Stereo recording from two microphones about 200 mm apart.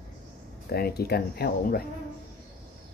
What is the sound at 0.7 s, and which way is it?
Speech, 50° left (ahead or behind).